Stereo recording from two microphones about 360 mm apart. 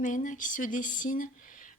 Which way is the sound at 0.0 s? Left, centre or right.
Left.